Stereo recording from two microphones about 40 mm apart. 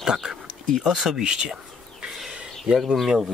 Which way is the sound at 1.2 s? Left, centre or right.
Right.